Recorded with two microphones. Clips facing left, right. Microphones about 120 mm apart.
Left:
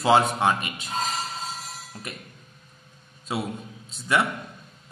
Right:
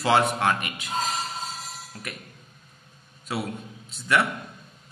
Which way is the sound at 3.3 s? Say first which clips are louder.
Left 1 dB; 20° left (ahead or behind).